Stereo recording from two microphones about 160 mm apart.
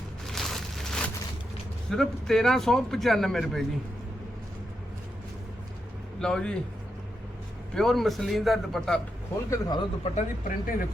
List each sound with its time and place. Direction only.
0.3 s a sound: centre (ahead or behind)
1.9 s speech: centre (ahead or behind)
6.1 s speech: 5° left (ahead or behind)
7.8 s speech: centre (ahead or behind)
9.5 s speech: 25° left (ahead or behind)
10.0 s speech: 50° left (ahead or behind)